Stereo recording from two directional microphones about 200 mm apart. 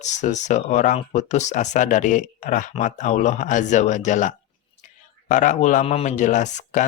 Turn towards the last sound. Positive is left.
turn(degrees=40)  # may be behind; listen again after turning